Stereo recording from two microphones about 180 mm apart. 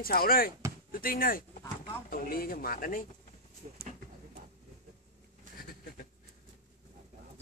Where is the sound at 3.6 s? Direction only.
40° right (ahead or behind).